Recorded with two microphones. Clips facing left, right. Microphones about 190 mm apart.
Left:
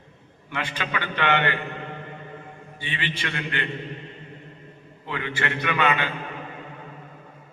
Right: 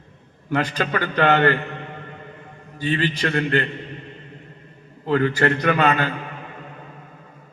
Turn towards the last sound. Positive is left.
turn(degrees=-40)  # may be behind; listen again after turning